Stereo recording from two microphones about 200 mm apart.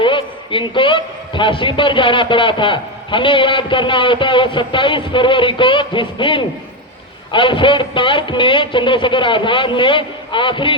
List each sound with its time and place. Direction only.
0.0 s a man's voice: 25° left (ahead or behind)